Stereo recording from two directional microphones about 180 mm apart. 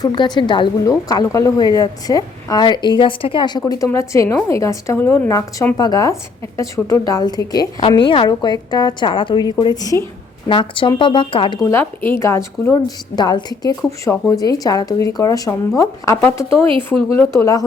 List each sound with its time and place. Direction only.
0.0 s a woman's voice: 25° left (ahead or behind)
6.8 s a woman's voice: 5° left (ahead or behind)
7.1 s a woman's voice: 20° left (ahead or behind)
11.6 s a woman's voice: 15° left (ahead or behind)